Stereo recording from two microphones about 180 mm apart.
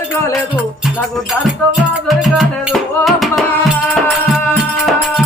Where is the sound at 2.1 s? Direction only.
Centre (ahead or behind).